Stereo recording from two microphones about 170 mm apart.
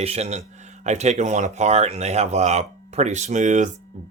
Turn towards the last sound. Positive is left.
turn(degrees=-45)  # may be behind; listen again after turning